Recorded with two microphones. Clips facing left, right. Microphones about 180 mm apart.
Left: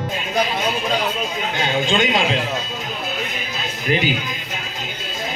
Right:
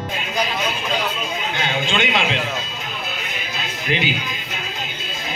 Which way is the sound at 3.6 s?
45° left (ahead or behind).